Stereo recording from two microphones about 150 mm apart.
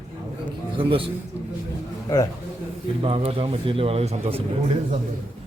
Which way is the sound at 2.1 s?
20° left (ahead or behind).